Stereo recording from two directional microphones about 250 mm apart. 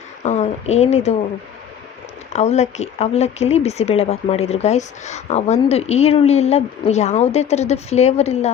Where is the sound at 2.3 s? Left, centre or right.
Left.